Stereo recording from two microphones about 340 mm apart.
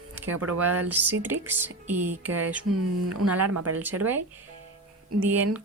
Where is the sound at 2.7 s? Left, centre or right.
Right.